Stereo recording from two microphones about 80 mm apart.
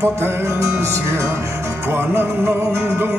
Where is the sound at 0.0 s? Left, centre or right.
Right.